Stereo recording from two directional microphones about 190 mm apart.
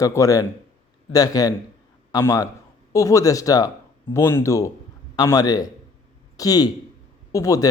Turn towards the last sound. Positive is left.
turn(degrees=15)  # may be behind; listen again after turning